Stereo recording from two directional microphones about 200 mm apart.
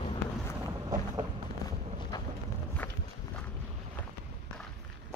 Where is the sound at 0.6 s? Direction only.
20° right (ahead or behind).